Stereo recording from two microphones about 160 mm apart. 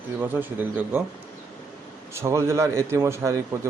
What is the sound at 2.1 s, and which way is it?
Speech, 15° right (ahead or behind).